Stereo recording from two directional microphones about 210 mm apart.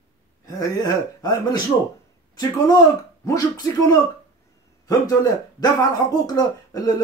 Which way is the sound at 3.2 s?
15° left (ahead or behind).